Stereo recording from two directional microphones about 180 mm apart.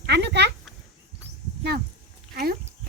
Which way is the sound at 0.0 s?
65° right (ahead or behind).